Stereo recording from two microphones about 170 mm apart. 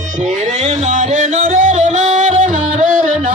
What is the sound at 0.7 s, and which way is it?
Music, 45° right (ahead or behind).